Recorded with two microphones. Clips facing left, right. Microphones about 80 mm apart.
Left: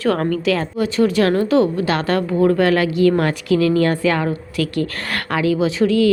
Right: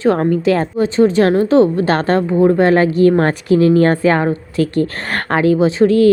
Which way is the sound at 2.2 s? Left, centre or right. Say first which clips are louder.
Right 3 dB; right.